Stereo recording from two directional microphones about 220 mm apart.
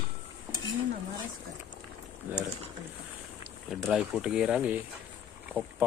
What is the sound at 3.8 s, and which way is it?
Speech, 5° right (ahead or behind).